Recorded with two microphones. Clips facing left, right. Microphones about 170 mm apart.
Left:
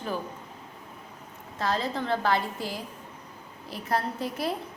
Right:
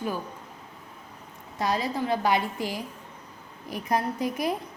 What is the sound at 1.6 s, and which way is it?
A woman's voice, 15° right (ahead or behind).